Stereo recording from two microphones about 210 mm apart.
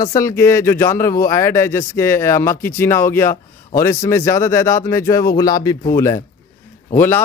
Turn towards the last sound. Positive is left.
turn(degrees=10)  # may be behind; listen again after turning